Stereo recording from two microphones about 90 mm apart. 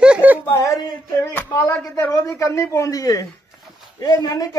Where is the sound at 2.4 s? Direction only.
35° left (ahead or behind).